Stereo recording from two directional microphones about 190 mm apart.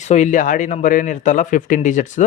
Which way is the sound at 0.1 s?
40° left (ahead or behind).